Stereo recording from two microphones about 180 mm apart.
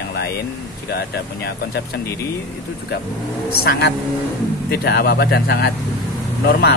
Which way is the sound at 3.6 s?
60° left (ahead or behind).